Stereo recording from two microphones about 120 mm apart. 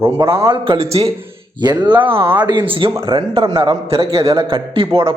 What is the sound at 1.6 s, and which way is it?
Speech, 35° right (ahead or behind).